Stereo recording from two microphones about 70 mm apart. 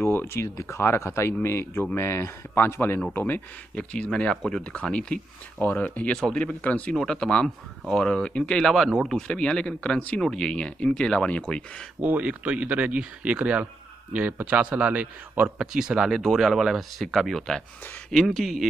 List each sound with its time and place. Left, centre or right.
0.0 s speech: left
3.7 s speech: centre
4.7 s speech: centre
9.3 s speech: centre
12.0 s a man's voice: right; by 18.7 s centre